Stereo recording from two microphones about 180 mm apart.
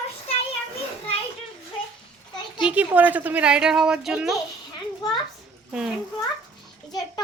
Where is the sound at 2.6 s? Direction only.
10° right (ahead or behind).